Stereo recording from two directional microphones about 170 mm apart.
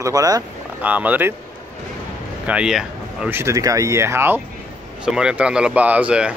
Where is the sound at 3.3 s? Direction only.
20° right (ahead or behind).